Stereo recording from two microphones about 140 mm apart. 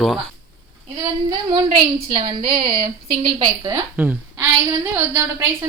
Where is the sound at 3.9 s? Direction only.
10° right (ahead or behind).